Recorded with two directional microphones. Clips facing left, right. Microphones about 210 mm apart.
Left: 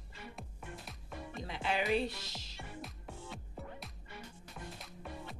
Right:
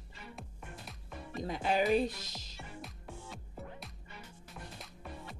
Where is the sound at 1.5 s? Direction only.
40° right (ahead or behind).